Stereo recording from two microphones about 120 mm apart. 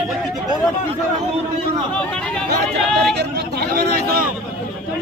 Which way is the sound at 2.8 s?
Centre (ahead or behind).